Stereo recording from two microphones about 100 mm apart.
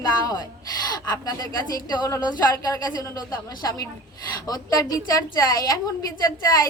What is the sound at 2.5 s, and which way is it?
Speech, 30° left (ahead or behind).